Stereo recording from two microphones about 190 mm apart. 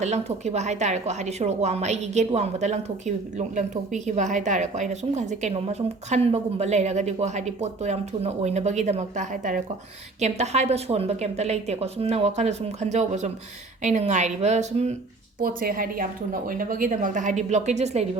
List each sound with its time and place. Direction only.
0.0 s a woman's voice: 35° right (ahead or behind)
15.4 s a woman's voice: 50° right (ahead or behind)